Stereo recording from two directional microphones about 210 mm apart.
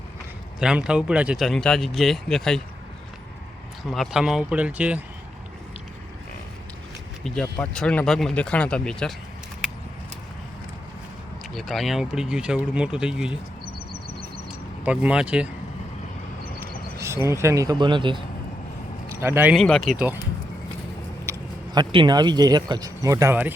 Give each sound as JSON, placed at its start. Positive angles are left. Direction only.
{"t": 0.6, "sound": "speech", "side_deg": -5}
{"t": 3.8, "sound": "speech", "side_deg": 0}
{"t": 7.3, "sound": "speech", "side_deg": 5}
{"t": 11.5, "sound": "speech", "side_deg": 0}
{"t": 14.8, "sound": "speech", "side_deg": -5}
{"t": 17.0, "sound": "speech", "side_deg": -15}
{"t": 19.1, "sound": "speech", "side_deg": -10}
{"t": 19.5, "sound": "speech", "side_deg": 0}
{"t": 21.3, "sound": "a sound", "side_deg": -15}
{"t": 21.8, "sound": "speech", "side_deg": -20}